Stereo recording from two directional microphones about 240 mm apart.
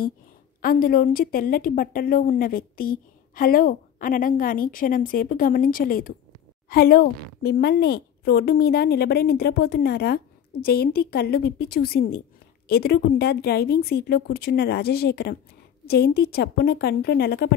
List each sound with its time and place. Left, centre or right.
0.6 s speech: left